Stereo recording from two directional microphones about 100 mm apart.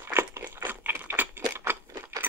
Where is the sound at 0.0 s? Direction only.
25° right (ahead or behind).